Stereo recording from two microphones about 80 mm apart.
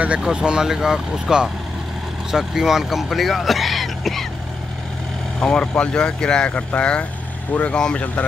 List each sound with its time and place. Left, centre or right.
0.2 s speech: centre
5.4 s speech: centre